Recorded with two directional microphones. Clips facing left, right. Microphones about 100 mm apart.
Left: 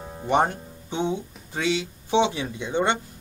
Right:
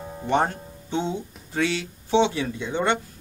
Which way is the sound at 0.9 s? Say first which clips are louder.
Even; 15° left (ahead or behind).